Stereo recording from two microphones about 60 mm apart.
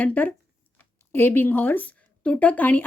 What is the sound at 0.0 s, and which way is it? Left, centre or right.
Speech, left.